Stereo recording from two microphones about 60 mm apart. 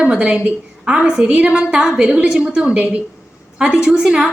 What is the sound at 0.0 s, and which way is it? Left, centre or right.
A woman's voice, right.